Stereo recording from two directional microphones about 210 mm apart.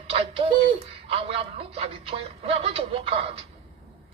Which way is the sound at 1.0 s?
25° right (ahead or behind).